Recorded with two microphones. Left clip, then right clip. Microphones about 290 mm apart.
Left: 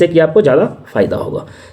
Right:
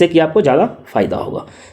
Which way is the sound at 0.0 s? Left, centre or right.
Centre.